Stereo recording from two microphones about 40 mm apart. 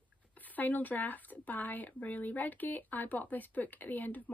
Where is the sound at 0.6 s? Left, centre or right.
Left.